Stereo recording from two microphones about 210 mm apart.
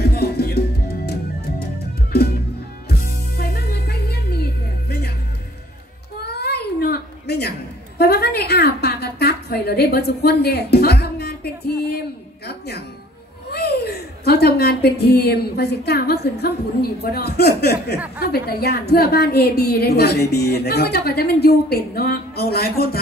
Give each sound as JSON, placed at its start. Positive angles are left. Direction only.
{"t": 0.0, "sound": "music", "side_deg": 50}
{"t": 2.1, "sound": "music", "side_deg": 50}
{"t": 6.3, "sound": "a sound", "side_deg": 50}
{"t": 12.4, "sound": "music", "side_deg": 50}
{"t": 13.5, "sound": "a woman's voice", "side_deg": 50}